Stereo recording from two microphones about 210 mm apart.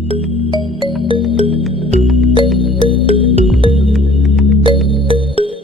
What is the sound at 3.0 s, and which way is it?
Music, 25° right (ahead or behind).